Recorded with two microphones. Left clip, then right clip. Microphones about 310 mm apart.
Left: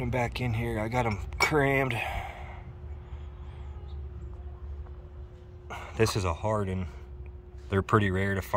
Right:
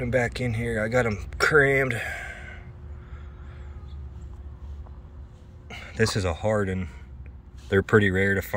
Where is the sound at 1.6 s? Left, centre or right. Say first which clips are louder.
Right 7 dB; left.